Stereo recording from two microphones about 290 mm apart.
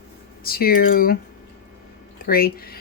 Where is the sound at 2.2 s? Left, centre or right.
Left.